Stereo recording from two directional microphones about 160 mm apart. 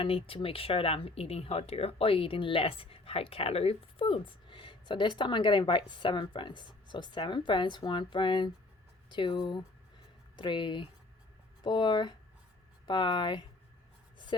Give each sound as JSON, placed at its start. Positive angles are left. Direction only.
{"t": 0.0, "sound": "speech", "side_deg": 35}